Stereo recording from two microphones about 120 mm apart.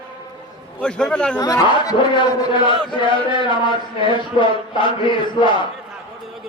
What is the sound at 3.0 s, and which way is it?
A man's voice, 45° left (ahead or behind).